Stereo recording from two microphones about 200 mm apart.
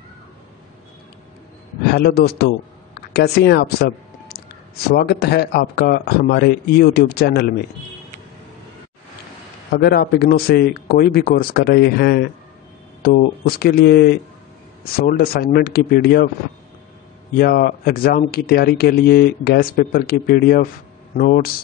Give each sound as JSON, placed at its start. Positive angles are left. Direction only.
{"t": 1.9, "sound": "speech", "side_deg": 50}
{"t": 9.7, "sound": "speech", "side_deg": 50}
{"t": 17.4, "sound": "speech", "side_deg": 50}